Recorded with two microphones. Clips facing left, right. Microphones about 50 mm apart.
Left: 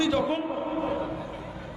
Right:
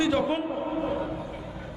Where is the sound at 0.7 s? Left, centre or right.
Left.